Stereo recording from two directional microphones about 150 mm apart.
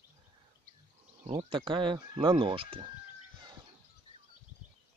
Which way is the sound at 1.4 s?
35° right (ahead or behind).